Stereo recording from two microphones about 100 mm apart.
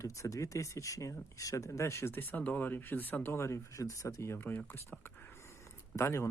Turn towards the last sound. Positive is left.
turn(degrees=25)  # may be behind; listen again after turning